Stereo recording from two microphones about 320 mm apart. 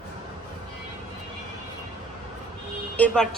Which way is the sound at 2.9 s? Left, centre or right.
Centre.